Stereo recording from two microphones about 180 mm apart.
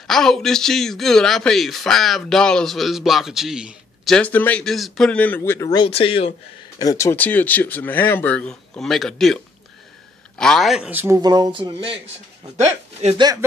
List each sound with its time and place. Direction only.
0.0 s a man's voice: centre (ahead or behind); by 5.9 s 20° left (ahead or behind)
5.9 s speech: 30° left (ahead or behind)
6.8 s a man's voice: 20° left (ahead or behind); by 11.1 s 10° right (ahead or behind)
11.1 s speech: 20° right (ahead or behind)
13.2 s speech: 20° right (ahead or behind)